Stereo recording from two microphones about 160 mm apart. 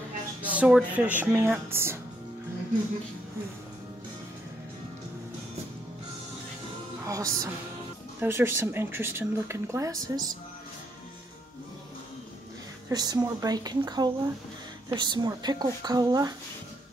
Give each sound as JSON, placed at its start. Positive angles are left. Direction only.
{"t": 0.4, "sound": "speech", "side_deg": -10}
{"t": 7.1, "sound": "speech", "side_deg": -20}
{"t": 12.9, "sound": "speech", "side_deg": -25}